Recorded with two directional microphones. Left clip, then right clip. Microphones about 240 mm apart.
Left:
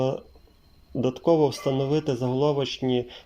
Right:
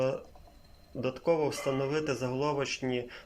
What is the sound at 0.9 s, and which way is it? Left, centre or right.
Speech, left.